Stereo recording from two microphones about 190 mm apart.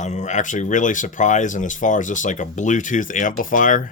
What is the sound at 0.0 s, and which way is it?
Speech, 40° left (ahead or behind).